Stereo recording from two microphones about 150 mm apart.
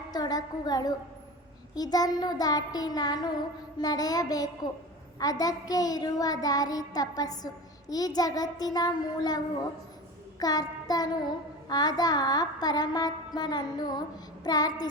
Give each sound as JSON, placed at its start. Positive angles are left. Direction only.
{"t": 0.1, "sound": "child singing", "side_deg": 25}
{"t": 10.4, "sound": "child singing", "side_deg": 25}